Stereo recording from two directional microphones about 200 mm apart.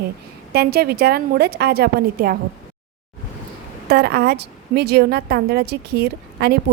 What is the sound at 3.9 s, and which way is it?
A woman's voice, 55° right (ahead or behind).